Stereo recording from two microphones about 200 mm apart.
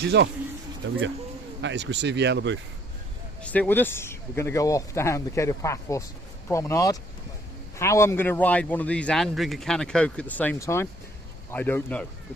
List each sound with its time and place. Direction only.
0.0 s speech: 60° right (ahead or behind)
1.6 s speech: 60° right (ahead or behind)
3.4 s a man's voice: 5° left (ahead or behind)